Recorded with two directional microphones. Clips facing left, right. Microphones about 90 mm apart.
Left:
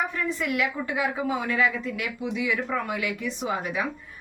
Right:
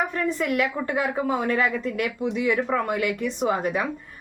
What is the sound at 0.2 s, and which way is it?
A woman's voice, 40° right (ahead or behind).